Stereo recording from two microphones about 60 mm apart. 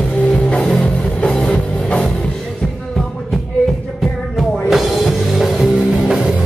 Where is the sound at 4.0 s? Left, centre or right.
Centre.